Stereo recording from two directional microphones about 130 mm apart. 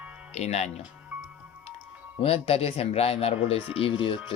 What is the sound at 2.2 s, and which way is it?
Speech, 50° left (ahead or behind).